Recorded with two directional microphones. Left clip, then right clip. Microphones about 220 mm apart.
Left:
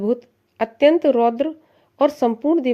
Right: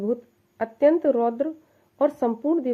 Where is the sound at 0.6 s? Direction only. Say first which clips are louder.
Left 4 dB; 35° left (ahead or behind).